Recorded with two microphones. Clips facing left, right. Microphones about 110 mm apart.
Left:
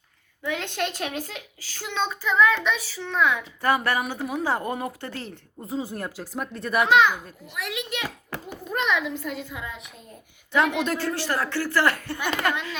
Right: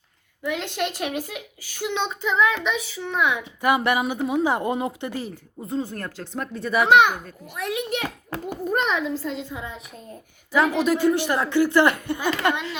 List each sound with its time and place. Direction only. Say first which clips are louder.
0.4 s speech: right 2 dB; 5° right (ahead or behind)
5.8 s speech: right 1 dB; 10° left (ahead or behind)
6.8 s a child's voice: right 3 dB; 65° right (ahead or behind)
7.9 s a child's voice: right 4 dB; 50° right (ahead or behind); by 9.8 s 30° right (ahead or behind)
10.8 s speech: right 6 dB; 10° right (ahead or behind)